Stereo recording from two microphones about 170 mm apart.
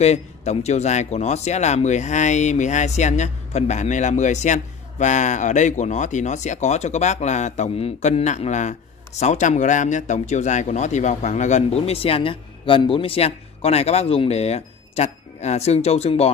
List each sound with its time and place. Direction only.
0.0 s speech: 40° left (ahead or behind)